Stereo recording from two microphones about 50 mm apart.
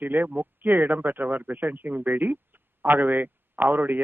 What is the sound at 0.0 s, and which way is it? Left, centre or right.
Speech, right.